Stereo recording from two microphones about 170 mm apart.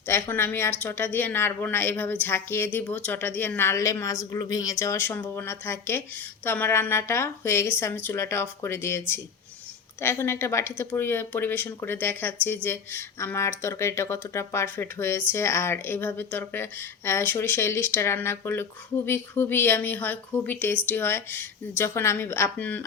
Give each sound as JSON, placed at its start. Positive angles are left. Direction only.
{"t": 0.1, "sound": "a woman's voice", "side_deg": 10}